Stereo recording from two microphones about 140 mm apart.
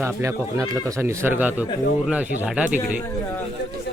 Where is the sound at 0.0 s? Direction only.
20° right (ahead or behind).